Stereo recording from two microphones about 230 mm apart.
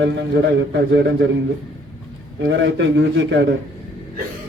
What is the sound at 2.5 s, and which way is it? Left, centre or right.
Speech, right.